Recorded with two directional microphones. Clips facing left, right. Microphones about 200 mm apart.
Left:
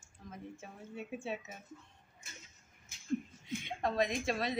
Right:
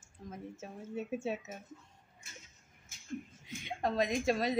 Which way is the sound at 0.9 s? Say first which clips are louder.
Right 4 dB; 45° right (ahead or behind).